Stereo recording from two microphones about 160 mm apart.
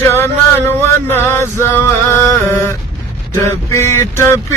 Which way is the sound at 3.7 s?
15° left (ahead or behind).